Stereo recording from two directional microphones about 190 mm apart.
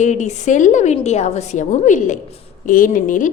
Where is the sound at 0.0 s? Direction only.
40° left (ahead or behind).